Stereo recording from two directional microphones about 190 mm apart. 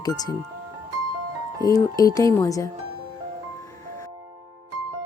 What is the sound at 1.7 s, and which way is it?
Speech, 20° left (ahead or behind).